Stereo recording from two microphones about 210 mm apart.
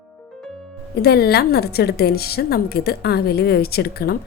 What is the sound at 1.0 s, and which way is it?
A woman's voice, 50° left (ahead or behind).